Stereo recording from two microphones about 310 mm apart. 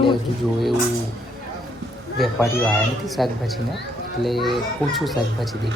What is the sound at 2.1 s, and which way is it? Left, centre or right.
A child's voice, centre.